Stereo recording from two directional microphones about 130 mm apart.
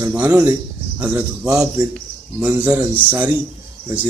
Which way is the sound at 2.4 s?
15° right (ahead or behind).